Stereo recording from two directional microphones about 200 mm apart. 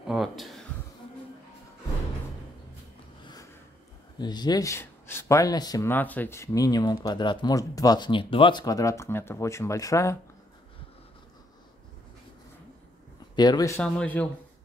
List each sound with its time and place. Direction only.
0.1 s a sound: centre (ahead or behind)
4.2 s speech: 20° left (ahead or behind)
13.4 s speech: 20° left (ahead or behind)